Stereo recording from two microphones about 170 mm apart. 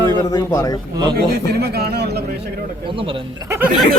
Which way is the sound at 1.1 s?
65° right (ahead or behind).